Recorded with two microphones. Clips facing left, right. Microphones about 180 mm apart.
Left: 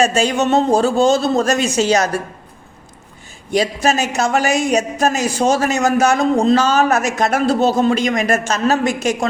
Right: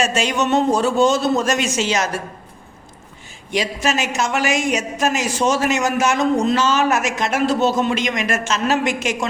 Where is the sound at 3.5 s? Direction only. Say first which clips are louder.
Left 4 dB; 35° left (ahead or behind).